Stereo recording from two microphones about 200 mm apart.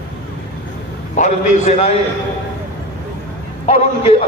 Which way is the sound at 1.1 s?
35° left (ahead or behind).